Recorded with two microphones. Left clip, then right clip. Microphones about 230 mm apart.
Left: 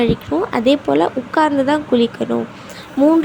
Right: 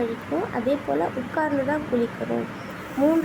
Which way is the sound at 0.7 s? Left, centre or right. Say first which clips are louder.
Left 10 dB; left.